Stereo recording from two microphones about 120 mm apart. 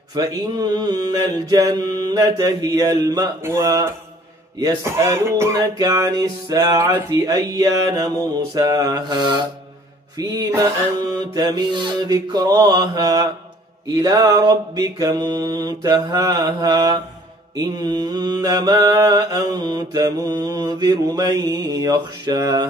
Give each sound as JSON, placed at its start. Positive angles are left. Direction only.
{"t": 0.1, "sound": "mantra", "side_deg": -35}
{"t": 3.4, "sound": "speech", "side_deg": -20}
{"t": 5.6, "sound": "mantra", "side_deg": -30}